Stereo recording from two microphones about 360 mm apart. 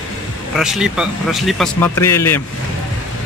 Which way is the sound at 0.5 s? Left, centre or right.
Centre.